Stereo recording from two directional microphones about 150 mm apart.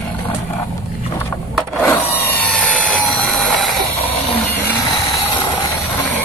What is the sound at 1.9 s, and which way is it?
Helicopter, 10° left (ahead or behind).